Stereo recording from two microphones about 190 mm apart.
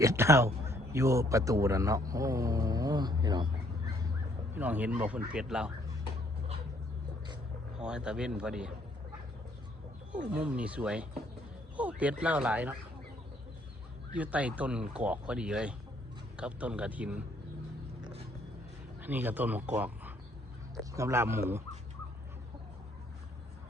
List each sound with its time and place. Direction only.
0.0 s a man's voice: 15° right (ahead or behind)
4.5 s speech: 10° right (ahead or behind)
7.8 s speech: 5° right (ahead or behind)
10.1 s speech: 5° right (ahead or behind)
14.2 s speech: 5° right (ahead or behind)
19.0 s speech: 10° right (ahead or behind)